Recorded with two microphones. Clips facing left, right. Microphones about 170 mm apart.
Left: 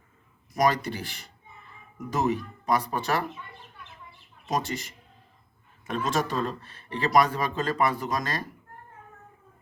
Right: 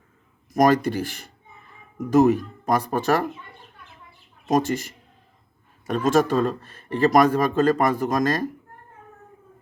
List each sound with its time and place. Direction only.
0.5 s speech: 45° right (ahead or behind)
4.4 s speech: 45° right (ahead or behind)